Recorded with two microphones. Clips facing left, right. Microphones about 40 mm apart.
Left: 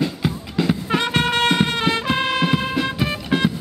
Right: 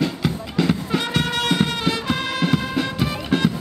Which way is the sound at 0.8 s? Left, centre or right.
Left.